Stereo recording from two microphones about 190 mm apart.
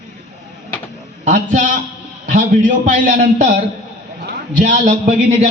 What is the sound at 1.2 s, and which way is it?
A man's voice, 40° right (ahead or behind).